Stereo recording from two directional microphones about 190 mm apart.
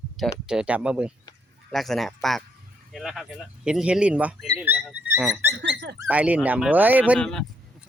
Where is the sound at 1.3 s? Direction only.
20° left (ahead or behind).